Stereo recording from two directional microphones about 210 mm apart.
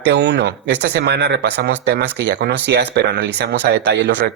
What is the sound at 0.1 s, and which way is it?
Speech, 55° right (ahead or behind).